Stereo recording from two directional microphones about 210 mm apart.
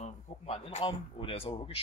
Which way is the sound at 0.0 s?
30° left (ahead or behind).